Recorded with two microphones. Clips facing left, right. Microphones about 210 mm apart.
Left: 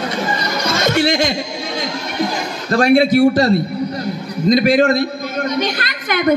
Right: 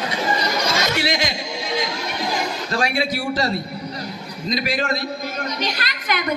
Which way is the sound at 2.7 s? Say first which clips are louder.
Left 13 dB; 55° left (ahead or behind).